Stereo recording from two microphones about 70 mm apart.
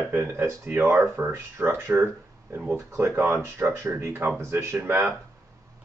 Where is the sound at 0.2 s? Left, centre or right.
Right.